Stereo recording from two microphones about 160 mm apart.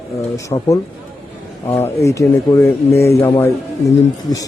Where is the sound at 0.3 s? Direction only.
20° left (ahead or behind).